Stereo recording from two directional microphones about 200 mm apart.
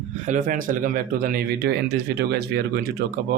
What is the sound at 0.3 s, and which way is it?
Speech, 40° right (ahead or behind).